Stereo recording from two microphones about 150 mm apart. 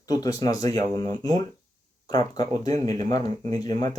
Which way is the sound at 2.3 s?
25° left (ahead or behind).